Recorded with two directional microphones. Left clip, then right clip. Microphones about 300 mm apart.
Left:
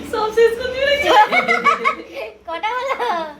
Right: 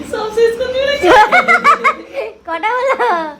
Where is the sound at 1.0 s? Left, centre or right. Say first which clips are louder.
Right 6 dB; right.